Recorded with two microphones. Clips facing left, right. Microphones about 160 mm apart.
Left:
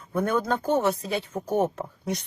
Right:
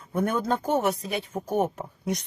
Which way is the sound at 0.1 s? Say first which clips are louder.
Left 1 dB; 20° right (ahead or behind).